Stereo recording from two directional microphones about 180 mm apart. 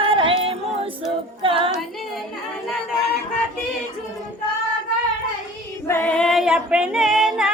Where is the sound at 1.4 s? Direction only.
30° right (ahead or behind).